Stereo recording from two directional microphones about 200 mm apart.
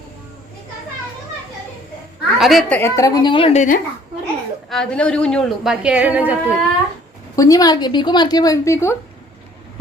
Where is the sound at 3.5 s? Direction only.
40° left (ahead or behind).